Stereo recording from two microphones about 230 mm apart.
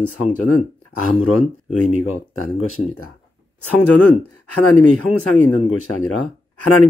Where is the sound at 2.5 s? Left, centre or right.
Left.